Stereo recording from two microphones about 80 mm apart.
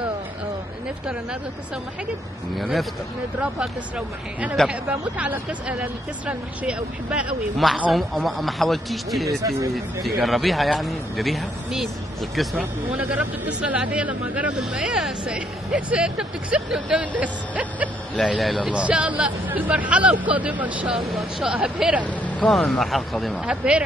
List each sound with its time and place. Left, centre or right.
2.5 s speech: centre
3.3 s speech: centre
7.9 s speech: centre
9.3 s speech: right
10.0 s speech: centre
12.5 s speech: centre
18.3 s speech: centre
18.7 s speech: centre
21.0 s speech: centre
21.5 s speech: centre
22.0 s vehicle: centre
22.5 s speech: centre
23.4 s speech: centre